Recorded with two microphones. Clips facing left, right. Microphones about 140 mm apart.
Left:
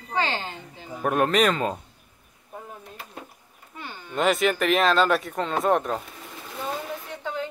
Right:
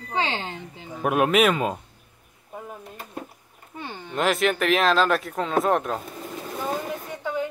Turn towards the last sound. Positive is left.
turn(degrees=-10)  # may be behind; listen again after turning